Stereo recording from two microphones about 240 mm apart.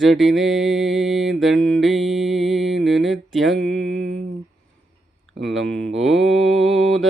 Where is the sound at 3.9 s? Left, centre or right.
Right.